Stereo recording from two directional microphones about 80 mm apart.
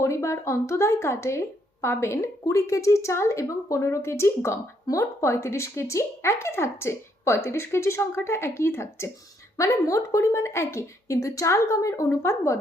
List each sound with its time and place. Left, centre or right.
0.0 s speech: left